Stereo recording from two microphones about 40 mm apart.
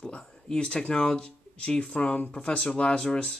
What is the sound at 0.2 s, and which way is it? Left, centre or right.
Speech, centre.